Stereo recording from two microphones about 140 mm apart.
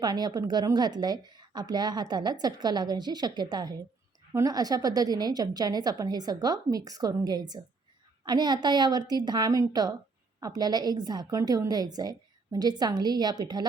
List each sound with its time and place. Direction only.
0.0 s a woman's voice: 30° right (ahead or behind)